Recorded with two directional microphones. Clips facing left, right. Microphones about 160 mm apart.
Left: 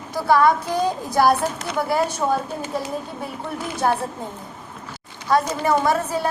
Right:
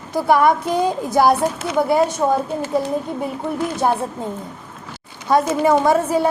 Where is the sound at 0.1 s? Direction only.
20° right (ahead or behind).